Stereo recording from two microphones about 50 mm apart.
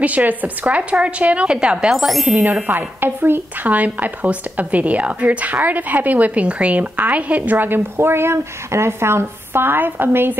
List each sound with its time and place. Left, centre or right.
0.0 s speech: right; by 2.0 s centre
2.0 s speech: centre
2.2 s a woman's voice: right
2.7 s speech: right
3.6 s a woman's voice: right